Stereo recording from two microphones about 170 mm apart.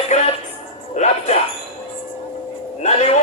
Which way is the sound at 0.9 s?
40° left (ahead or behind).